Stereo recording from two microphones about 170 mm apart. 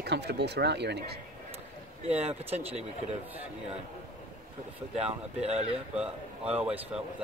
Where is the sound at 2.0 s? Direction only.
40° right (ahead or behind).